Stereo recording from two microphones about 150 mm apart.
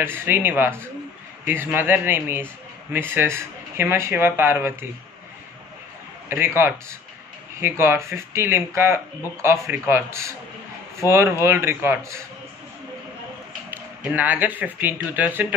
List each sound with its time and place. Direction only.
0.0 s speech: 15° right (ahead or behind)
6.2 s a man's voice: 15° right (ahead or behind)
11.4 s speech: 15° right (ahead or behind)
13.7 s speech: 10° right (ahead or behind)